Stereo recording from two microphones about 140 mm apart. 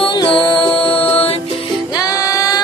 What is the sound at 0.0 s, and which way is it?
Music, 35° left (ahead or behind).